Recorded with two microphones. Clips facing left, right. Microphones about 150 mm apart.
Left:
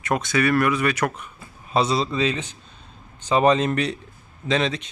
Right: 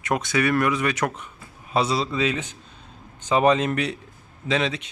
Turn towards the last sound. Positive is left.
turn(degrees=-10)  # may be behind; listen again after turning